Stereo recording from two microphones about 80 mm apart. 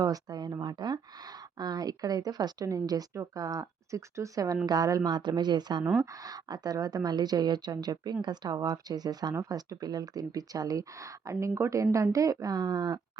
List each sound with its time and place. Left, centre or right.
0.0 s speech: right
4.6 s speech: right
5.1 s speech: right
6.0 s speech: right